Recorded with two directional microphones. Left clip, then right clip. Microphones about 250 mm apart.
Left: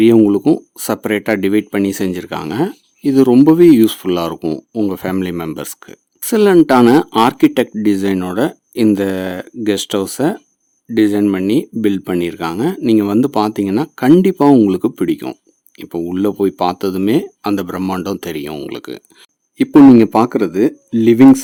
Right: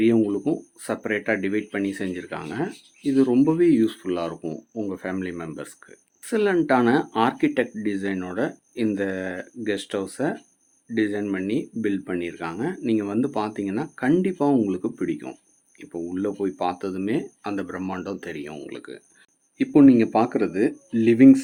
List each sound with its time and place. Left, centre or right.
0.0 s speech: left